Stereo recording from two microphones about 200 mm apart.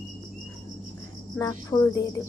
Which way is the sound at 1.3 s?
15° left (ahead or behind).